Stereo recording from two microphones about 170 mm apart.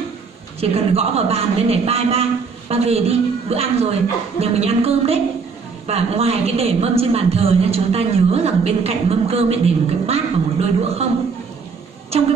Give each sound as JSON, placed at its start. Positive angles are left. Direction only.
{"t": 0.6, "sound": "a woman's voice", "side_deg": -35}
{"t": 12.1, "sound": "a woman's voice", "side_deg": -35}